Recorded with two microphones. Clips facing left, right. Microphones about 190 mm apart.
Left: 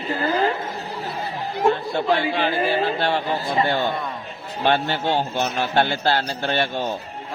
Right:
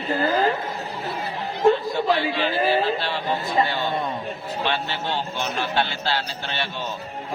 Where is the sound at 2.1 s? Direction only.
50° left (ahead or behind).